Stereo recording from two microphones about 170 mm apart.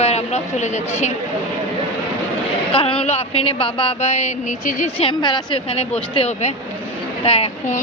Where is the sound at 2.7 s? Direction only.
30° left (ahead or behind); by 4.8 s 50° left (ahead or behind).